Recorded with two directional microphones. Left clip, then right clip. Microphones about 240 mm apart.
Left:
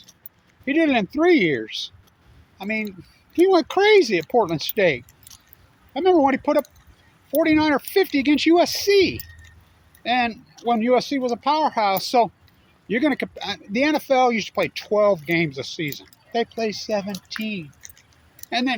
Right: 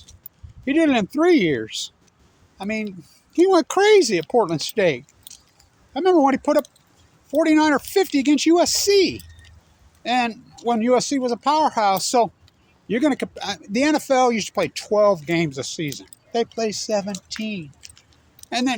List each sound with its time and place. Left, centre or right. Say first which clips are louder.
0.6 s speech: right 1 dB; centre
5.3 s squish: right 3 dB; right
5.9 s speech: right 1 dB; centre